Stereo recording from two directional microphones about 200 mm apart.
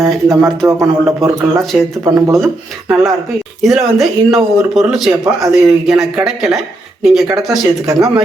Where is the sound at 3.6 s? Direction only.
Centre (ahead or behind).